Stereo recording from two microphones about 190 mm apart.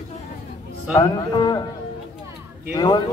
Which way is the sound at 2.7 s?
20° left (ahead or behind).